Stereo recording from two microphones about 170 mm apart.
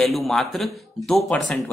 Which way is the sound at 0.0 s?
Centre (ahead or behind).